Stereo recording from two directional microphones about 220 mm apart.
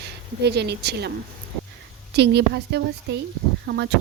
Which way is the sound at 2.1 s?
50° right (ahead or behind).